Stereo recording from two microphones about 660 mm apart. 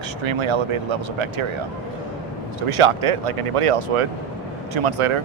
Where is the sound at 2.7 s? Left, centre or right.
Right.